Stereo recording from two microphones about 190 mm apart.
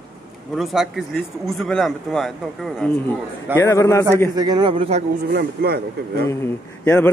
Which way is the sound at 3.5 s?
15° left (ahead or behind).